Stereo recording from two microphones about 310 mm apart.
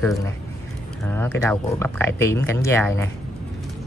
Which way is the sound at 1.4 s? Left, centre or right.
Centre.